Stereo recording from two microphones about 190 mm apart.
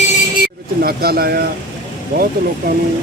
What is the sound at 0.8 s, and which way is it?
Speech, 55° right (ahead or behind).